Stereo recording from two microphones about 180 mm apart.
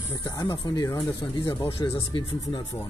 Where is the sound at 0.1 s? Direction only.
20° left (ahead or behind).